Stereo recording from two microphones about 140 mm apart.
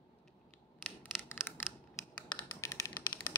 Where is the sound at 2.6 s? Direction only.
20° left (ahead or behind).